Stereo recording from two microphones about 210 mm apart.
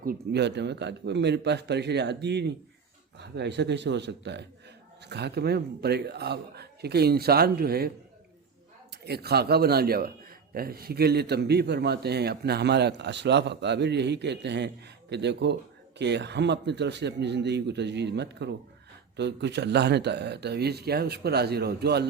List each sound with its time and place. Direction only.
0.0 s a man's voice: 50° right (ahead or behind)
9.0 s a man's voice: 50° right (ahead or behind)